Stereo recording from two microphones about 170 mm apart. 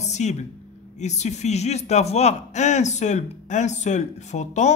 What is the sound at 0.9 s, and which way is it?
A man's voice, 40° left (ahead or behind).